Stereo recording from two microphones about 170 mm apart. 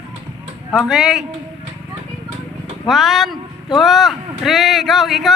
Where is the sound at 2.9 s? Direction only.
Centre (ahead or behind).